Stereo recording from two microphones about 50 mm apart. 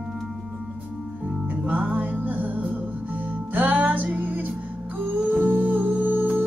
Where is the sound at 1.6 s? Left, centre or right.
Right.